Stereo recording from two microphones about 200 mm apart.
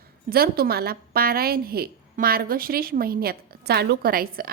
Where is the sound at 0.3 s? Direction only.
50° right (ahead or behind).